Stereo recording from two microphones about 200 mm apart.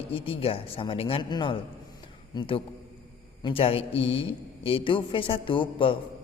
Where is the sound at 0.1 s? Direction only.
25° left (ahead or behind).